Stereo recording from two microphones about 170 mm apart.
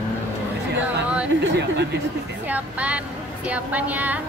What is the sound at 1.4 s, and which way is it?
Speech, 80° right.